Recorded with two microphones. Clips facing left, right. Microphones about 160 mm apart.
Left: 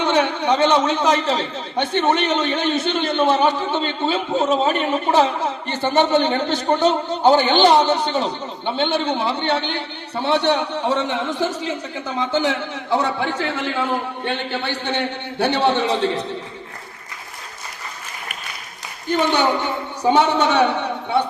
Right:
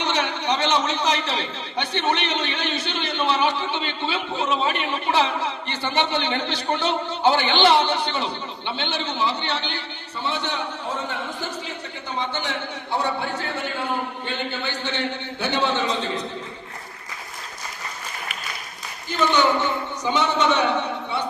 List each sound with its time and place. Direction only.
0.0 s a man's voice: 50° left (ahead or behind); by 11.5 s 90° left
12.9 s a man's voice: 90° left
14.8 s a man's voice: 60° left (ahead or behind)
19.1 s a man's voice: 60° left (ahead or behind)